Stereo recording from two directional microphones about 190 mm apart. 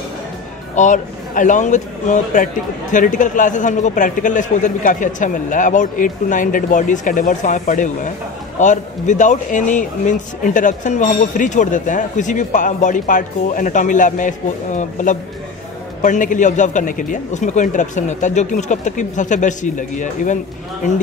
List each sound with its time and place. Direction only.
0.7 s a man's voice: 40° left (ahead or behind)